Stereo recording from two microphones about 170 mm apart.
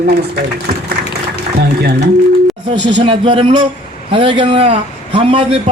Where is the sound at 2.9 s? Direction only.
30° right (ahead or behind).